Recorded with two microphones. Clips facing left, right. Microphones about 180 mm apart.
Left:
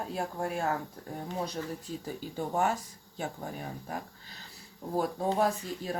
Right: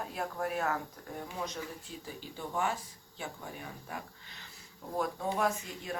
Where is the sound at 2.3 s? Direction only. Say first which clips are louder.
Left 5 dB; 45° left (ahead or behind).